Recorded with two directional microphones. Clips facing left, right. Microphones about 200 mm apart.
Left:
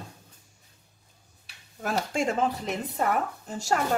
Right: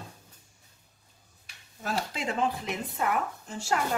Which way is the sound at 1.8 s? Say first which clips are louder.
Left 5 dB; 45° left (ahead or behind).